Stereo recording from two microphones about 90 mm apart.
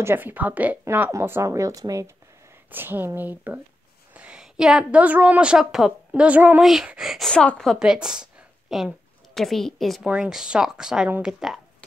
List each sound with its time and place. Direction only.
0.0 s a woman's voice: 25° right (ahead or behind)
2.7 s a woman's voice: 20° right (ahead or behind)
6.6 s a woman's voice: 5° right (ahead or behind)
7.2 s a woman's voice: 10° left (ahead or behind)
7.8 s a woman's voice: 5° right (ahead or behind)
10.0 s a woman's voice: 10° right (ahead or behind)